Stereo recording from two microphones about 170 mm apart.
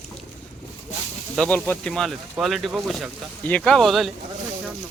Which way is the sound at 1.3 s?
5° left (ahead or behind).